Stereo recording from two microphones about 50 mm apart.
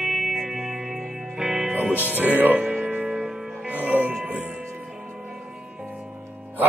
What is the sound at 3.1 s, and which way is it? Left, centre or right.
Music, centre.